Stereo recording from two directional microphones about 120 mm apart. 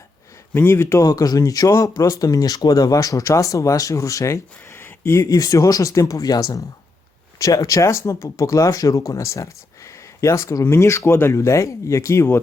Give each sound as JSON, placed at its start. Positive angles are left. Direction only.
{"t": 0.5, "sound": "speech", "side_deg": 20}
{"t": 1.0, "sound": "speech", "side_deg": 30}